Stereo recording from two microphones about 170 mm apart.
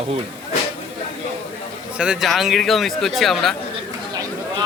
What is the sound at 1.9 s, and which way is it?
A man's voice, 5° right (ahead or behind).